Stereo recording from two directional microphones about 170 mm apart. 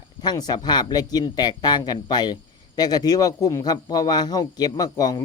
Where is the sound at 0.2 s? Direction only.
25° left (ahead or behind).